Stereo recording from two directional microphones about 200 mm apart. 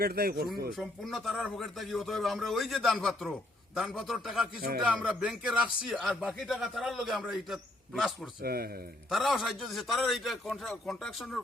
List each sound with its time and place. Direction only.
0.0 s speech: 50° right (ahead or behind)
0.8 s speech: centre (ahead or behind)
8.4 s speech: 50° right (ahead or behind)
9.0 s speech: centre (ahead or behind)